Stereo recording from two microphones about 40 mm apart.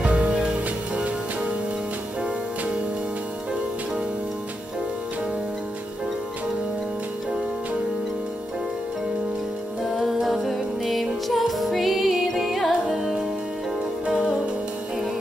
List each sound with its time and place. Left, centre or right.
0.0 s music: right
9.9 s music: centre
14.0 s music: centre